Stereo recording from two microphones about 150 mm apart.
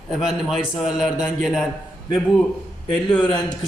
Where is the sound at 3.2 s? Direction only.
30° left (ahead or behind).